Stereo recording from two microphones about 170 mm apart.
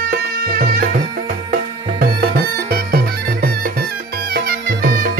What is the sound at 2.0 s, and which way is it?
Music, 65° right (ahead or behind).